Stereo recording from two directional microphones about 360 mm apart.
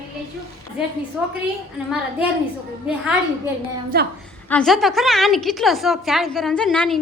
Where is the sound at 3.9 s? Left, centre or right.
Right.